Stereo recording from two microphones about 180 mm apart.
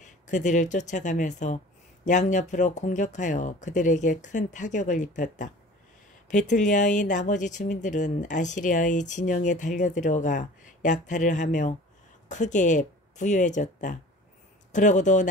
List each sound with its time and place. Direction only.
0.0 s speech: 45° left (ahead or behind)